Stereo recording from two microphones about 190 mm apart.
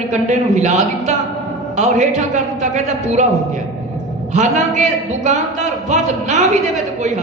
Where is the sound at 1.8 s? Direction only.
40° right (ahead or behind).